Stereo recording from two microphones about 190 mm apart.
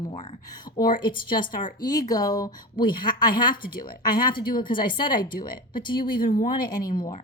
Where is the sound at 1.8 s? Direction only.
20° left (ahead or behind).